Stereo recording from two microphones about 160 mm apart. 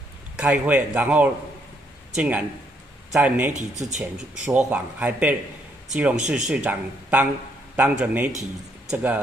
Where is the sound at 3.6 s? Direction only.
45° right (ahead or behind).